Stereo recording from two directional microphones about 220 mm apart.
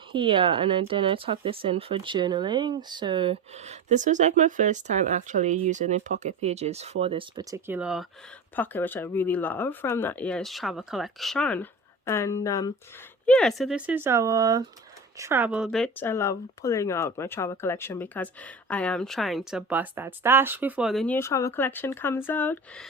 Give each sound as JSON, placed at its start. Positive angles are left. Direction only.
{"t": 0.1, "sound": "speech", "side_deg": -20}
{"t": 7.7, "sound": "speech", "side_deg": -5}
{"t": 8.5, "sound": "speech", "side_deg": 10}
{"t": 13.2, "sound": "a woman's voice", "side_deg": 5}